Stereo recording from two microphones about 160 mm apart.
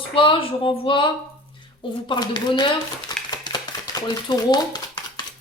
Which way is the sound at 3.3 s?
25° left (ahead or behind).